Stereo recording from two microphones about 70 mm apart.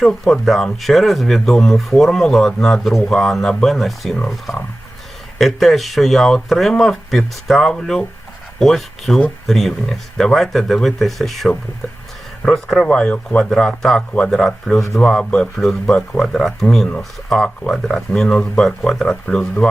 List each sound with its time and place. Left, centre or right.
0.0 s speech: centre
5.4 s speech: centre